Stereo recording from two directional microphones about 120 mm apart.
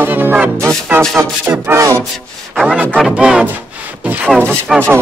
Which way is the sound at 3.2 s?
5° right (ahead or behind).